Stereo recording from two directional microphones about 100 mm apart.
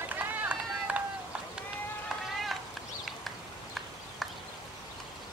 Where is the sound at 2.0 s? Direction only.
Centre (ahead or behind).